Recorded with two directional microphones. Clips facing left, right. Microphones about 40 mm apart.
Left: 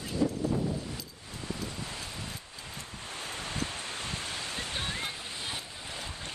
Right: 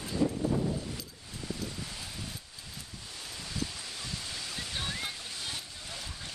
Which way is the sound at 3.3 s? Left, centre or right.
Left.